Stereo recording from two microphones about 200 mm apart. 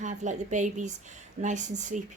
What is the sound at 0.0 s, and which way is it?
Speech, 35° right (ahead or behind).